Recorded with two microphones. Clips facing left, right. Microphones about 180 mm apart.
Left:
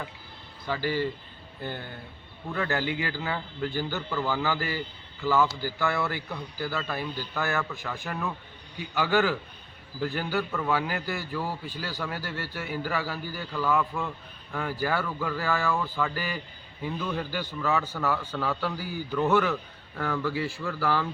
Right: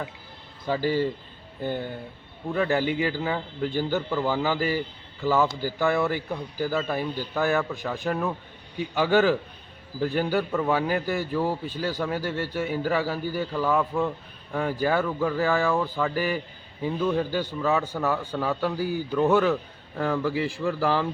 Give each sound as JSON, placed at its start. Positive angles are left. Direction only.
{"t": 0.7, "sound": "a man's voice", "side_deg": -25}
{"t": 2.5, "sound": "a man's voice", "side_deg": -20}